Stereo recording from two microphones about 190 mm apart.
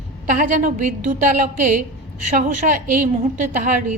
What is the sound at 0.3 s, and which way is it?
A woman's voice, 45° right (ahead or behind).